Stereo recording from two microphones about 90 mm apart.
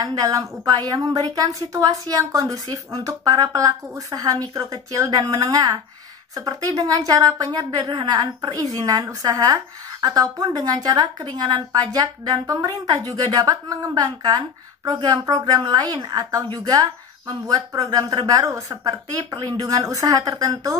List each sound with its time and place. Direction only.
0.0 s a woman's voice: 45° right (ahead or behind)
19.6 s a woman's voice: 40° right (ahead or behind)